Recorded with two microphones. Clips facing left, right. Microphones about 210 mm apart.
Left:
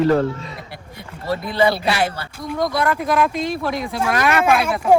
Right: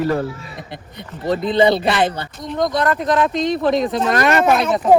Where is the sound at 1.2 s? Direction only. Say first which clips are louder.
Right 4 dB; 20° right (ahead or behind).